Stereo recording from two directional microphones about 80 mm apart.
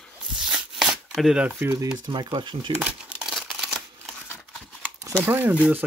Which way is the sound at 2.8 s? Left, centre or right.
Centre.